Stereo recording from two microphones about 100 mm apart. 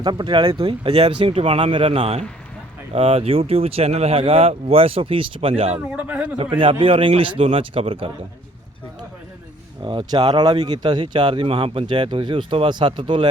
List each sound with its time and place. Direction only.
0.0 s speech: 45° right (ahead or behind); by 5.8 s 75° right (ahead or behind)
6.0 s a man's voice: 15° right (ahead or behind)
6.3 s speech: 60° right (ahead or behind)
9.8 s speech: 55° right (ahead or behind)
10.2 s speech: 45° right (ahead or behind)